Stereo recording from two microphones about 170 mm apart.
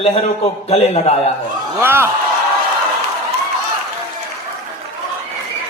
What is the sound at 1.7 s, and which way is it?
Speech, 15° right (ahead or behind).